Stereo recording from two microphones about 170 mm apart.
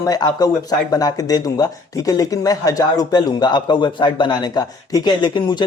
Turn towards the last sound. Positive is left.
turn(degrees=25)  # may be behind; listen again after turning